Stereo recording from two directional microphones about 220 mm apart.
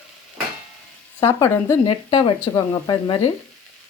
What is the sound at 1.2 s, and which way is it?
Speech, 15° left (ahead or behind).